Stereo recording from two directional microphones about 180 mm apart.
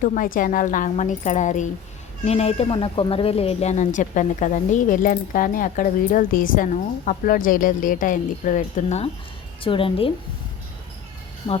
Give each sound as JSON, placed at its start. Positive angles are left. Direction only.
{"t": 0.0, "sound": "speech", "side_deg": 45}
{"t": 9.6, "sound": "a woman's voice", "side_deg": 30}